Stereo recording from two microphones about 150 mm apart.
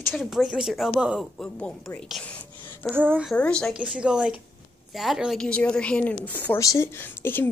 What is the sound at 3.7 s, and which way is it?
A woman's voice, 5° right (ahead or behind).